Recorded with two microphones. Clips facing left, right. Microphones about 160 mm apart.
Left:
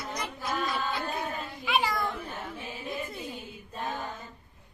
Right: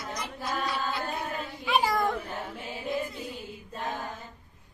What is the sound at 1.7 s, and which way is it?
Children playing, 40° right (ahead or behind).